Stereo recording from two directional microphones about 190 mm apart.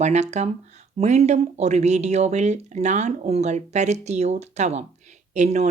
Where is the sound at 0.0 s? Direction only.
35° right (ahead or behind).